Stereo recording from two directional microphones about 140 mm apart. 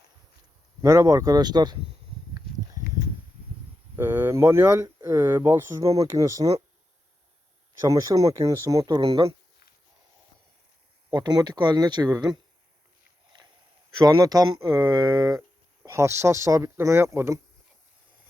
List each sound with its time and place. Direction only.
0.8 s speech: 25° right (ahead or behind)
3.9 s speech: 15° right (ahead or behind)
7.9 s speech: 25° right (ahead or behind)
11.2 s speech: 30° right (ahead or behind)
13.3 s a sound: 30° right (ahead or behind)
14.0 s speech: 25° right (ahead or behind)